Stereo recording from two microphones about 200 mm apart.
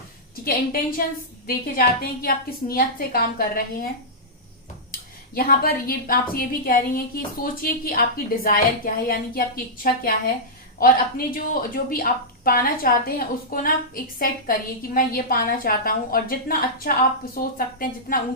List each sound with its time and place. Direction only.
0.4 s speech: 45° left (ahead or behind)
4.9 s speech: 45° left (ahead or behind)